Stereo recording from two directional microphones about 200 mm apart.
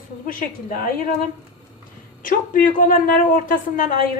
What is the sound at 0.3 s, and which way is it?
Speech, 45° left (ahead or behind).